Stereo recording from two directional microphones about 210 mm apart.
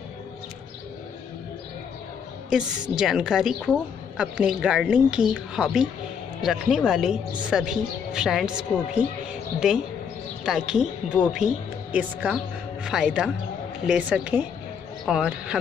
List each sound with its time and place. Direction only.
2.5 s speech: 5° right (ahead or behind)